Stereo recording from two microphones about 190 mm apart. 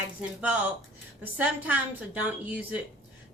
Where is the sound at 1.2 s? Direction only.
10° right (ahead or behind).